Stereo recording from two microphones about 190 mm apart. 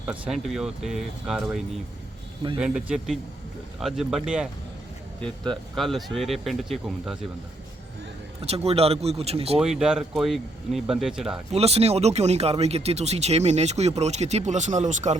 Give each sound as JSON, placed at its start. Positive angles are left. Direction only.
{"t": 0.1, "sound": "speech", "side_deg": 0}
{"t": 8.4, "sound": "speech", "side_deg": -30}
{"t": 9.6, "sound": "speech", "side_deg": -5}
{"t": 11.5, "sound": "speech", "side_deg": -35}